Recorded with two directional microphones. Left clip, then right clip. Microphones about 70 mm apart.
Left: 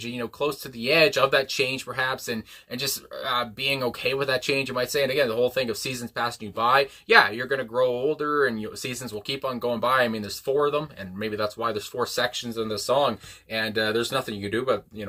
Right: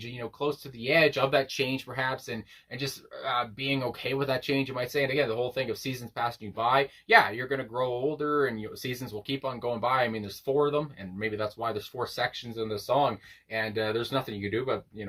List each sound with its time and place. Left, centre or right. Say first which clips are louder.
0.0 s speech: left 4 dB; left
1.4 s speech: left 4 dB; centre
7.5 s speech: left 6 dB; left